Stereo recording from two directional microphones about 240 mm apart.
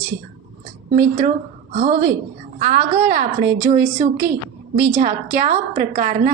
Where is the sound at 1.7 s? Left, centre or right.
Right.